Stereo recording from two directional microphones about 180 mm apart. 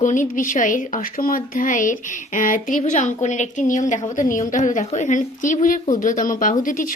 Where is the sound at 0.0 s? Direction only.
45° left (ahead or behind).